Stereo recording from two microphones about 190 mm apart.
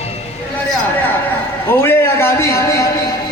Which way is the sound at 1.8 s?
15° left (ahead or behind).